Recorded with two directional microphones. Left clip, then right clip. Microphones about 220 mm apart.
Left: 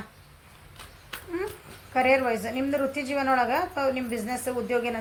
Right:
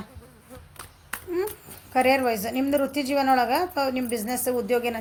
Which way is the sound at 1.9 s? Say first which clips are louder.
Right 1 dB; 45° right (ahead or behind).